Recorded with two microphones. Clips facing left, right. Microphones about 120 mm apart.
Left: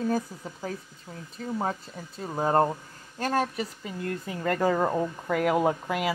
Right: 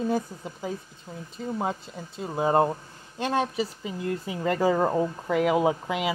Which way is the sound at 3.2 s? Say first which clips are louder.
Right 1 dB; 20° right (ahead or behind).